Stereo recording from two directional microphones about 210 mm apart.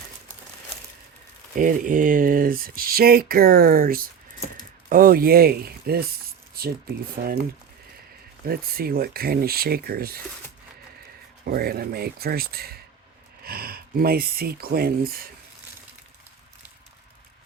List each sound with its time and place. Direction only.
1.5 s speech: 40° right (ahead or behind)
8.4 s speech: 45° right (ahead or behind)
11.4 s speech: 45° right (ahead or behind)